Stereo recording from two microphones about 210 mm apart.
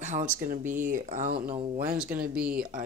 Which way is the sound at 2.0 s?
5° right (ahead or behind).